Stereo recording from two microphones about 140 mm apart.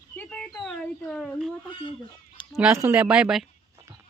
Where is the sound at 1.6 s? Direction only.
35° left (ahead or behind).